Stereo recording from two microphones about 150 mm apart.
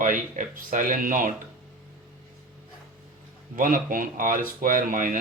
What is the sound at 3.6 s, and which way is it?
Speech, 65° right (ahead or behind).